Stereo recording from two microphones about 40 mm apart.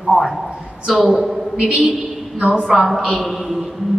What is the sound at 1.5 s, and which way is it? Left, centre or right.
Speech, centre.